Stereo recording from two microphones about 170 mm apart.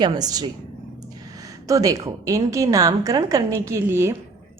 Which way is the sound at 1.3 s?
20° right (ahead or behind).